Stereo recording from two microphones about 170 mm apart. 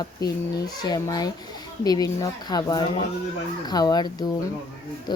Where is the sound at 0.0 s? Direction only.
20° left (ahead or behind).